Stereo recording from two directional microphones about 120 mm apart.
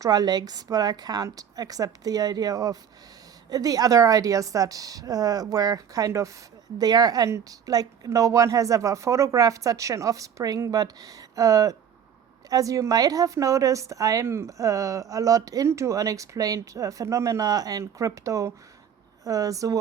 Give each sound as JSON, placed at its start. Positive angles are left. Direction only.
{"t": 0.0, "sound": "a woman's voice", "side_deg": -30}